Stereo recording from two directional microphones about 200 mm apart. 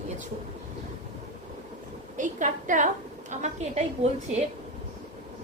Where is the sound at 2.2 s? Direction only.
40° right (ahead or behind).